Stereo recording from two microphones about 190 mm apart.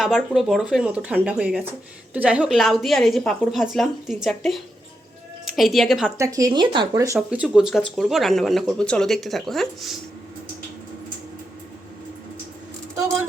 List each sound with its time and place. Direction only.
0.0 s speech: centre (ahead or behind)
6.1 s speech: 15° right (ahead or behind)
7.2 s speech: 5° right (ahead or behind)